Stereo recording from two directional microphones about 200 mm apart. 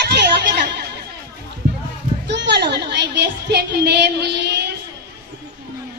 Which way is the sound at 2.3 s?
60° right (ahead or behind).